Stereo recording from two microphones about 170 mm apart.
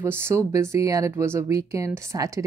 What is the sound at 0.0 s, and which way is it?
Speech, 15° right (ahead or behind).